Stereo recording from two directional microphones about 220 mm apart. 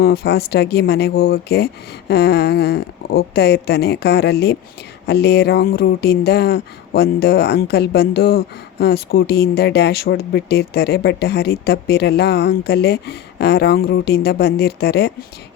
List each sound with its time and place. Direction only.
0.0 s speech: 45° left (ahead or behind)